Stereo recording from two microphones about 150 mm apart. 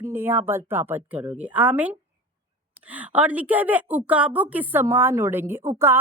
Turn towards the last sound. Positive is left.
turn(degrees=-15)  # may be behind; listen again after turning